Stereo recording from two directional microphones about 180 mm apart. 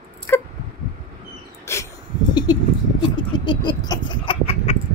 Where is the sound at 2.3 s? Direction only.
20° left (ahead or behind).